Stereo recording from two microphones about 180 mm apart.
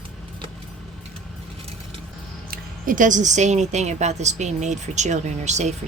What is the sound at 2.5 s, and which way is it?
Speech, 50° right (ahead or behind).